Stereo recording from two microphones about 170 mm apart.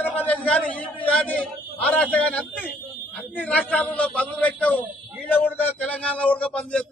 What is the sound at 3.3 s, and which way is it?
A man's voice, 5° left (ahead or behind).